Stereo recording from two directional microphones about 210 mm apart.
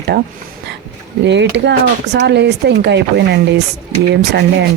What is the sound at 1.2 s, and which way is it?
Speech, 55° right (ahead or behind).